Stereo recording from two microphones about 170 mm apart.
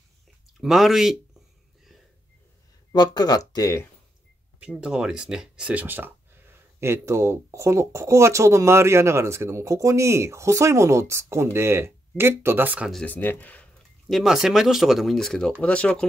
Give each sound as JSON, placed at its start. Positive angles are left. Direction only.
{"t": 0.6, "sound": "speech", "side_deg": 0}
{"t": 2.9, "sound": "speech", "side_deg": 25}
{"t": 4.6, "sound": "speech", "side_deg": -5}
{"t": 13.0, "sound": "speech", "side_deg": 10}